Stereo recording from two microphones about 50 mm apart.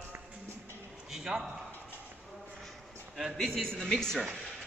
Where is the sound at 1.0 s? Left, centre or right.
Centre.